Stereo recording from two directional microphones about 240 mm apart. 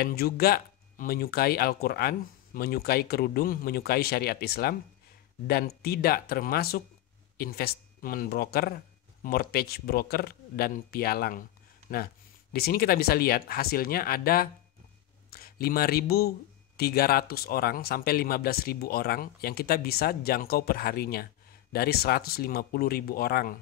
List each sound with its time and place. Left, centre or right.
0.0 s speech: left
12.5 s speech: left